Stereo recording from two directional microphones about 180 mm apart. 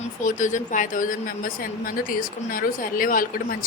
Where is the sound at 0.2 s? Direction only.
45° left (ahead or behind).